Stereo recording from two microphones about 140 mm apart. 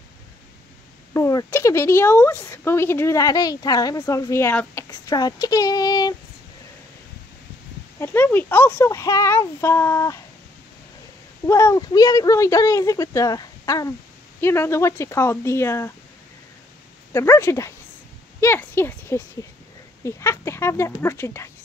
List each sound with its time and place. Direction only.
1.1 s speech: 20° left (ahead or behind)
8.0 s speech: 15° left (ahead or behind)
11.4 s speech: 20° left (ahead or behind)
17.1 s speech: 20° left (ahead or behind)